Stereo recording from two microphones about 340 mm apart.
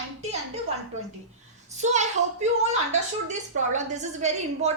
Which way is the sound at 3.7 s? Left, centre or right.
Centre.